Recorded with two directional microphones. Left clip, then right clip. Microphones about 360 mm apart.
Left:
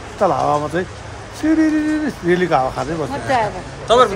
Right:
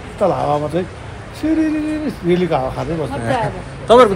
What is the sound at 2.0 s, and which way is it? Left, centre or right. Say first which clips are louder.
Speech: even; centre.